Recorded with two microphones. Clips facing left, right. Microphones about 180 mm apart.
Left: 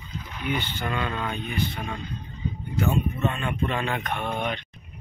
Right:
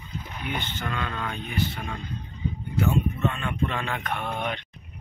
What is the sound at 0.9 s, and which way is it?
Speech, 10° left (ahead or behind).